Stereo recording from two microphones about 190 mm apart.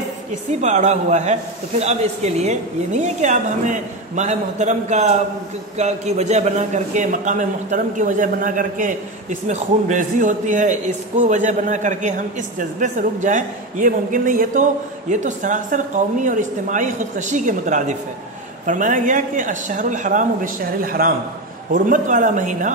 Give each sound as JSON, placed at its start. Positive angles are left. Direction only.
{"t": 0.6, "sound": "a man's voice", "side_deg": -40}